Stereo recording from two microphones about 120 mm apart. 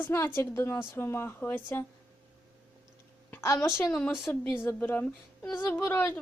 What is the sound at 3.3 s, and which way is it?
Speech, 20° left (ahead or behind).